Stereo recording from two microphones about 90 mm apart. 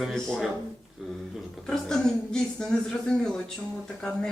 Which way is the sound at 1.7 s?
5° left (ahead or behind).